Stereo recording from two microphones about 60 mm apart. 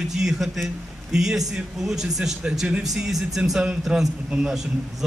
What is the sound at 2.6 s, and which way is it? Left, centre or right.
Speech, centre.